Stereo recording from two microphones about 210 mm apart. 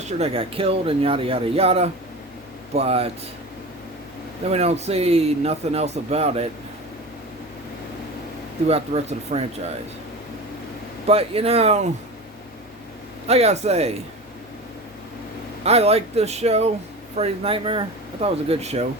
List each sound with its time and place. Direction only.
0.2 s speech: 25° right (ahead or behind)
4.4 s speech: 30° right (ahead or behind)
8.6 s speech: 30° right (ahead or behind)
11.0 s speech: 30° right (ahead or behind)
13.2 s speech: 30° right (ahead or behind)
15.6 s speech: 30° right (ahead or behind)